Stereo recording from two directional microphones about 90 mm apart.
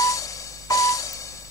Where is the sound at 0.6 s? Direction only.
40° left (ahead or behind).